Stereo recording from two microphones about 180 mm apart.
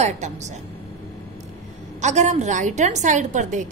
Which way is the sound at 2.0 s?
40° right (ahead or behind).